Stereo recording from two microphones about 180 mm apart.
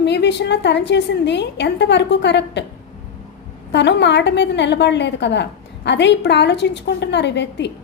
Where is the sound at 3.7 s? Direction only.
75° left (ahead or behind).